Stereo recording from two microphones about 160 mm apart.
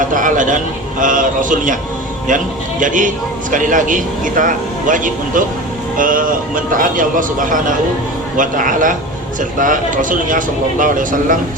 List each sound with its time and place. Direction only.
0.1 s speech: 55° right (ahead or behind)
2.8 s speech: 55° right (ahead or behind)